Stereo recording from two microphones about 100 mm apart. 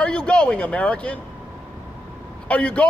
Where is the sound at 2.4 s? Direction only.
15° left (ahead or behind).